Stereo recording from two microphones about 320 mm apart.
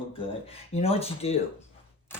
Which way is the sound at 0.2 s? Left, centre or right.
Centre.